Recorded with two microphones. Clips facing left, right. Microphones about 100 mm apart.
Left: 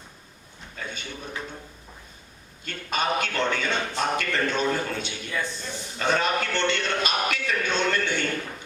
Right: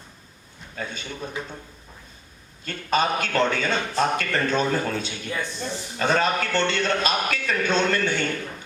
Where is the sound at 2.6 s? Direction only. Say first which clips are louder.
Right 4 dB; 40° right (ahead or behind).